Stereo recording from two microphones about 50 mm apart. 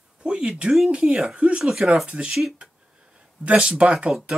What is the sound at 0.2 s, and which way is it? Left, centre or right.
Speech, centre.